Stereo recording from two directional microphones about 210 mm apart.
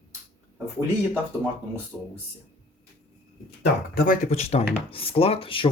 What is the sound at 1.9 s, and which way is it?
Speech, 5° left (ahead or behind).